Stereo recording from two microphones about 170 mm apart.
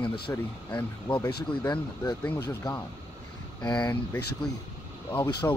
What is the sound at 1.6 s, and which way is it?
Speech, 25° left (ahead or behind).